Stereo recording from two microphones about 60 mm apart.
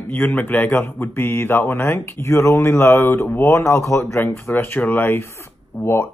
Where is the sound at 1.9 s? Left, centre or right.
Left.